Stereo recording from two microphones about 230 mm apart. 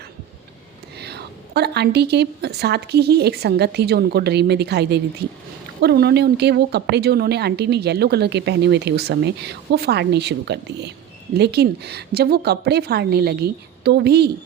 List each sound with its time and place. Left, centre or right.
0.9 s speech: right